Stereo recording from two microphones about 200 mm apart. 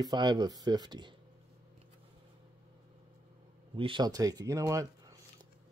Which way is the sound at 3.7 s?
25° right (ahead or behind).